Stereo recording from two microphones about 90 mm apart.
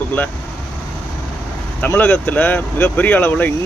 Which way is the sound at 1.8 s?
20° left (ahead or behind).